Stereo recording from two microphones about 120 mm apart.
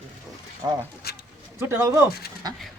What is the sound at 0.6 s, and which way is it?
Speech, 25° right (ahead or behind).